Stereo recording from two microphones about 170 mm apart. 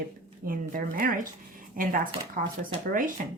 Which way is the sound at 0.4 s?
55° right (ahead or behind).